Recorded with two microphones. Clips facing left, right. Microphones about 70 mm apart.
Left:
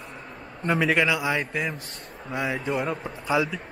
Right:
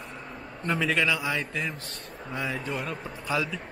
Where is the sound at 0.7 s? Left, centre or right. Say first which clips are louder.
Left 4 dB; centre.